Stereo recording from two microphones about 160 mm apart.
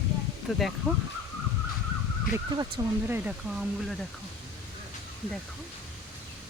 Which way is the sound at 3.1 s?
5° right (ahead or behind).